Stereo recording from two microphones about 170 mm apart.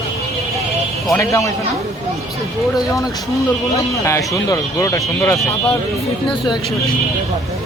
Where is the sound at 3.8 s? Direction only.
20° left (ahead or behind).